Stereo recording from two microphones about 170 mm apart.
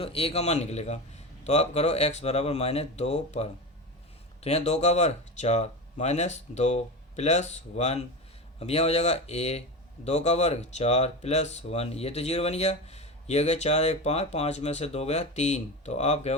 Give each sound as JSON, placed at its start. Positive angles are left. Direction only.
{"t": 0.0, "sound": "speech", "side_deg": 35}
{"t": 4.4, "sound": "speech", "side_deg": 40}